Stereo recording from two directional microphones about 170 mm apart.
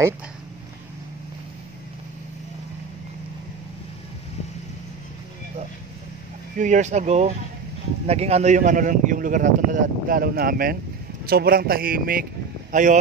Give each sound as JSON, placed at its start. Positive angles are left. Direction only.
{"t": 6.6, "sound": "a man's voice", "side_deg": -45}